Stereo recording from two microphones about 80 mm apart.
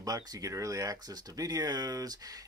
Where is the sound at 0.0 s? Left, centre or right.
Right.